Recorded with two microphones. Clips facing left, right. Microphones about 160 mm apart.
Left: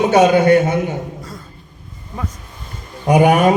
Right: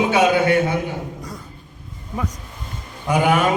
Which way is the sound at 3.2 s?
40° left (ahead or behind).